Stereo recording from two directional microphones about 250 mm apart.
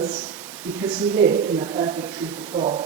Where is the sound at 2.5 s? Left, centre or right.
Right.